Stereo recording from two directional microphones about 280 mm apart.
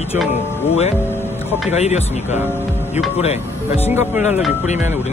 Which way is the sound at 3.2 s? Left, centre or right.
Left.